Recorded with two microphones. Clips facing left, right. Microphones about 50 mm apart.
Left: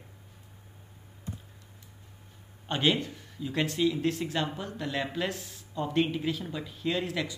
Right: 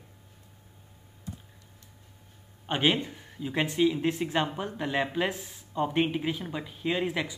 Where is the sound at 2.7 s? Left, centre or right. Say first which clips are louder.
Right 1 dB; centre.